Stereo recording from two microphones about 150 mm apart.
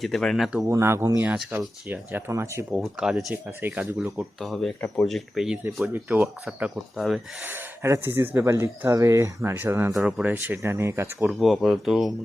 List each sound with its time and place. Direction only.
0.0 s speech: centre (ahead or behind)
0.7 s speech: 15° right (ahead or behind)
2.7 s speech: 5° right (ahead or behind)
4.2 s speech: centre (ahead or behind)
5.9 s speech: 15° right (ahead or behind)
6.2 s speech: centre (ahead or behind)
7.4 s speech: 15° right (ahead or behind)
11.3 s speech: centre (ahead or behind)